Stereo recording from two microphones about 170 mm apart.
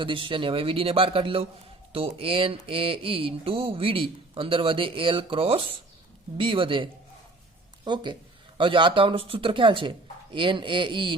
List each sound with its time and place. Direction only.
0.0 s speech: 30° right (ahead or behind)
7.9 s speech: 25° right (ahead or behind)